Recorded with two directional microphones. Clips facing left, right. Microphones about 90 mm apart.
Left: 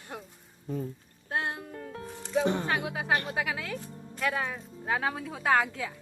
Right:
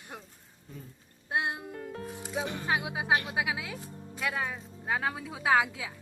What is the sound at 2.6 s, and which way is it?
A woman's voice, 15° right (ahead or behind).